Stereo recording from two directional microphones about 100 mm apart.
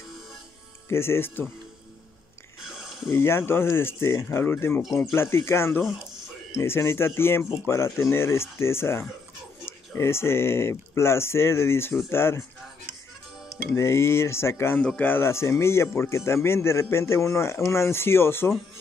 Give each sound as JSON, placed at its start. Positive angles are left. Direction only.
{"t": 0.8, "sound": "speech", "side_deg": 25}
{"t": 2.6, "sound": "a sound", "side_deg": -5}
{"t": 3.1, "sound": "speech", "side_deg": 25}
{"t": 13.7, "sound": "speech", "side_deg": 25}
{"t": 14.8, "sound": "speech", "side_deg": 15}